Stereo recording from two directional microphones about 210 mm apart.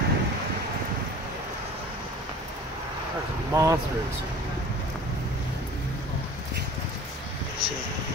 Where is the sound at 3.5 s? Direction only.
15° right (ahead or behind).